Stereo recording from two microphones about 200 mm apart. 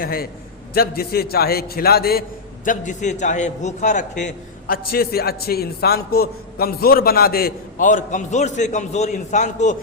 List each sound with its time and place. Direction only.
0.0 s a man's voice: 50° left (ahead or behind)
2.6 s a man's voice: 40° left (ahead or behind)